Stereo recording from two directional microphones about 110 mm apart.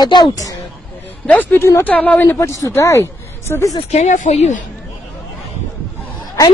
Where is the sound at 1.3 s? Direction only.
20° left (ahead or behind).